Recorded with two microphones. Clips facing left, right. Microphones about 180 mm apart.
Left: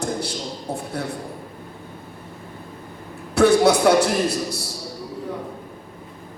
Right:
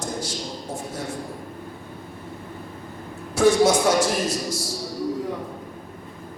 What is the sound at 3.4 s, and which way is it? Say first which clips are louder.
A man's voice: left 2 dB; 65° left (ahead or behind).